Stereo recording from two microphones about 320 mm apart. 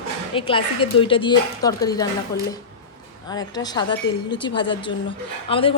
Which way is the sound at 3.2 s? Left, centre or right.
Centre.